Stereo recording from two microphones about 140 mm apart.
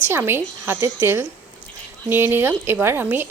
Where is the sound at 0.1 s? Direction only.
15° right (ahead or behind).